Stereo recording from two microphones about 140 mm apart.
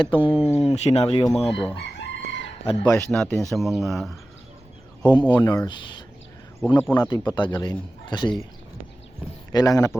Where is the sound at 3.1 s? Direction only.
5° left (ahead or behind).